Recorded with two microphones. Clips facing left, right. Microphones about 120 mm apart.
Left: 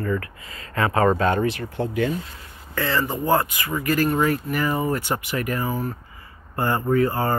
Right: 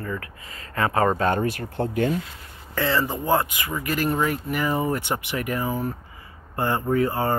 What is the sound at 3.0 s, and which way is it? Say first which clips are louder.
Speech: left 3 dB; 10° right (ahead or behind).